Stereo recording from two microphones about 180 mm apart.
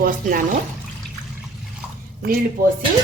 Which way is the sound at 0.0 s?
50° right (ahead or behind).